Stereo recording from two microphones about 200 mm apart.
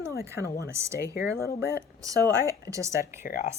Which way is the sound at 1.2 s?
50° left (ahead or behind).